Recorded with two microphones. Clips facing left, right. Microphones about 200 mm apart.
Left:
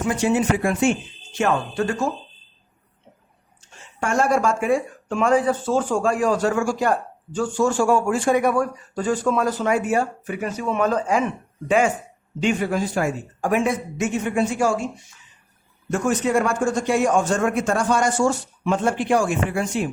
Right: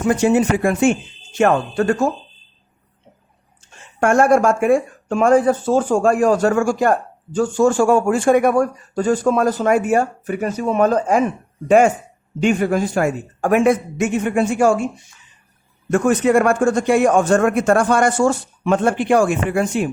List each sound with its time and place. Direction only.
0.1 s speech: 45° right (ahead or behind)
4.0 s speech: 55° right (ahead or behind)
12.4 s speech: 50° right (ahead or behind)
15.9 s a man's voice: 60° right (ahead or behind)